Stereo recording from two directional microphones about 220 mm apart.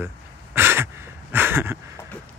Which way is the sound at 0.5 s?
10° right (ahead or behind).